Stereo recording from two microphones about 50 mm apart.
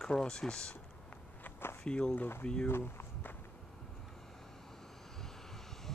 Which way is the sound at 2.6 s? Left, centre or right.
Left.